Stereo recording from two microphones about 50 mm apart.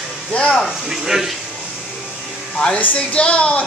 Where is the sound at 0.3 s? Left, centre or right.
Left.